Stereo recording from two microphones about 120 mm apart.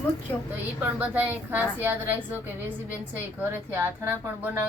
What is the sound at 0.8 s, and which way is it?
A woman's voice, 15° right (ahead or behind).